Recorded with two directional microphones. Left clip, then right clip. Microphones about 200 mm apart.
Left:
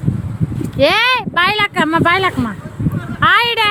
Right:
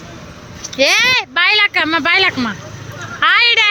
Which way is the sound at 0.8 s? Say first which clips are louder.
Even; 15° left (ahead or behind).